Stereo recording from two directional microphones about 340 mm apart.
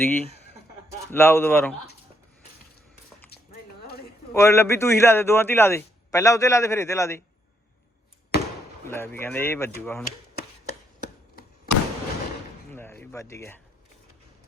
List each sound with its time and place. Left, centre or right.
0.0 s a man's voice: centre
3.2 s a sound: left
4.4 s a man's voice: centre
8.3 s basketball bounce: left
8.9 s a man's voice: centre
11.0 s chopping: left
12.7 s speech: centre